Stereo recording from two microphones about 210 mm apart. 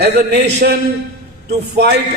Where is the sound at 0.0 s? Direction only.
50° right (ahead or behind).